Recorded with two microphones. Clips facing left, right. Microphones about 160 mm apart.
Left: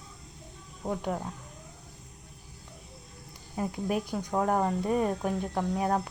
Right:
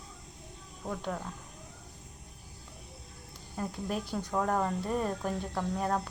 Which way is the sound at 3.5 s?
10° left (ahead or behind).